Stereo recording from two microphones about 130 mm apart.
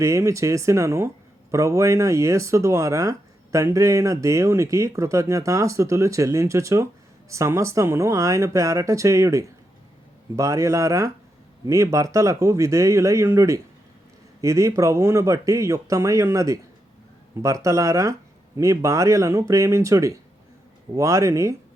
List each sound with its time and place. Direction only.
0.0 s speech: 25° right (ahead or behind)